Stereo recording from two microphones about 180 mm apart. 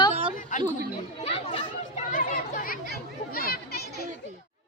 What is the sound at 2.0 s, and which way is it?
Chatter, 45° left (ahead or behind).